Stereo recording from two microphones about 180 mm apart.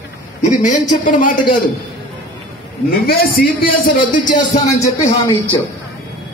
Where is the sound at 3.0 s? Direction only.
55° left (ahead or behind).